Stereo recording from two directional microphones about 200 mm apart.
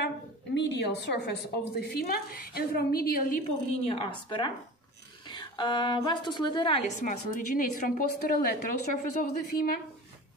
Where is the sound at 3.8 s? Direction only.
25° left (ahead or behind).